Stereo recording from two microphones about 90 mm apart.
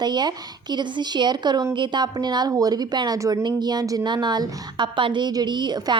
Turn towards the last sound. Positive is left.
turn(degrees=-50)  # may be behind; listen again after turning